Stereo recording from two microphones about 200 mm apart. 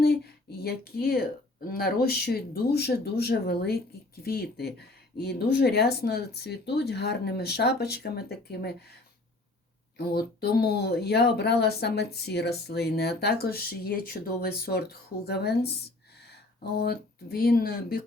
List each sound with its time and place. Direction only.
0.6 s speech: 50° left (ahead or behind)
10.0 s speech: 50° left (ahead or behind)
16.7 s speech: 50° left (ahead or behind)